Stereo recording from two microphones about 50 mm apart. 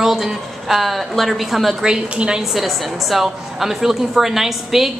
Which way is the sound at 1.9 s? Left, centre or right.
Centre.